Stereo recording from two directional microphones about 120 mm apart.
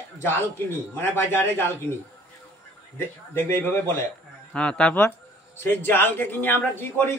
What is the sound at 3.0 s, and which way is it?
A man's voice, 15° left (ahead or behind).